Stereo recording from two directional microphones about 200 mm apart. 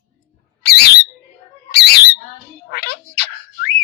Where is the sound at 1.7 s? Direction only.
55° left (ahead or behind).